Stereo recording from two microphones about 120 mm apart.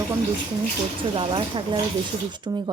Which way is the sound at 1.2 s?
45° right (ahead or behind).